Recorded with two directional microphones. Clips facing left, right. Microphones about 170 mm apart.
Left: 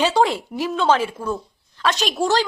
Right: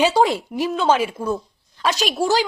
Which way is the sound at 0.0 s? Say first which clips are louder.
Right 1 dB; 15° right (ahead or behind).